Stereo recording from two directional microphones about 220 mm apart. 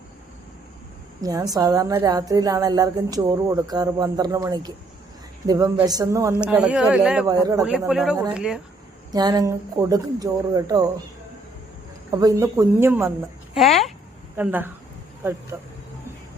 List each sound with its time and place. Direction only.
1.2 s a woman's voice: 15° right (ahead or behind)
6.4 s speech: 5° right (ahead or behind)
7.3 s a woman's voice: 15° right (ahead or behind)
7.6 s speech: 5° right (ahead or behind)
9.1 s a woman's voice: 15° right (ahead or behind)
12.1 s a woman's voice: 15° right (ahead or behind)
14.3 s a woman's voice: 10° right (ahead or behind)